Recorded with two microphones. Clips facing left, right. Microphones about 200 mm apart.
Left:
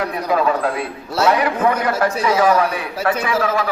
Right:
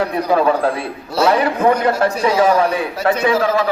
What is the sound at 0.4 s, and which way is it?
A man's voice, 30° right (ahead or behind).